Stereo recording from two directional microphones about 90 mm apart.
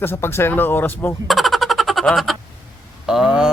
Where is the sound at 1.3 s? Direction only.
Centre (ahead or behind).